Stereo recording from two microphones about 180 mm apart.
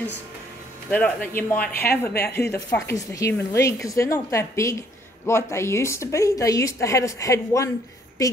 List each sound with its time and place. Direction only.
0.8 s a woman's voice: 10° left (ahead or behind)